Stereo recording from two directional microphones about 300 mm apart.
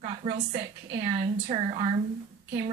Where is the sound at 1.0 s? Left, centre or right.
Centre.